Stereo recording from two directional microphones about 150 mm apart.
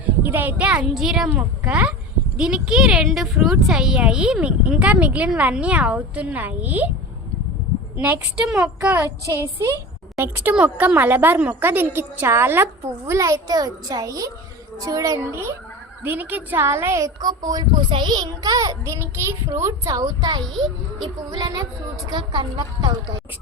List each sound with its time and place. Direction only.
0.2 s speech: 10° right (ahead or behind)
7.9 s a woman's voice: 10° right (ahead or behind); by 23.2 s 30° right (ahead or behind)